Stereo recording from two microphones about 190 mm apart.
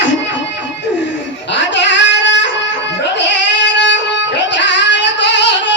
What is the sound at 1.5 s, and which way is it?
Goat, 70° left (ahead or behind).